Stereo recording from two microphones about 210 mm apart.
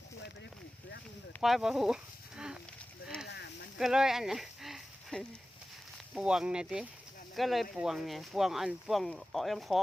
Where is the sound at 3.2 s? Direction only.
55° left (ahead or behind).